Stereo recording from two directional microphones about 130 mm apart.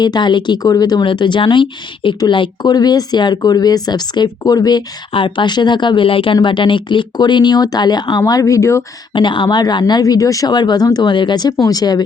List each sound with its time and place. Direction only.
0.0 s speech: 35° left (ahead or behind)
9.1 s speech: 40° left (ahead or behind)